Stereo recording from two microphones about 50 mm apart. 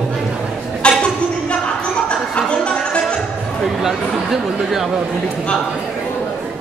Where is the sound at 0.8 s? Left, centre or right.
Centre.